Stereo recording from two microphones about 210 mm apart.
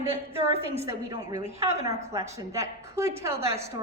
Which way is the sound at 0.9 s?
15° right (ahead or behind).